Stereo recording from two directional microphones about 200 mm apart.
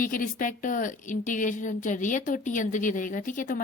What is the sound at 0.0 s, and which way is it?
A woman's voice, 40° left (ahead or behind).